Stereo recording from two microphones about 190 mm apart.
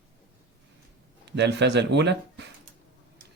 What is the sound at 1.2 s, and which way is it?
A man's voice, 65° right (ahead or behind).